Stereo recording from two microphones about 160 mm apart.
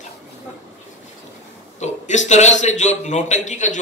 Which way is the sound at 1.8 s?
45° left (ahead or behind).